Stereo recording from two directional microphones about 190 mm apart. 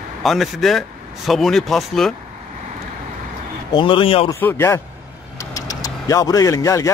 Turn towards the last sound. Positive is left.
turn(degrees=15)  # may be behind; listen again after turning